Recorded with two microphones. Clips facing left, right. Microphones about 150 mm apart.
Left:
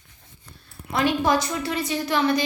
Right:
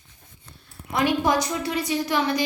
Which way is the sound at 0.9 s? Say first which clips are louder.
Even; 15° right (ahead or behind).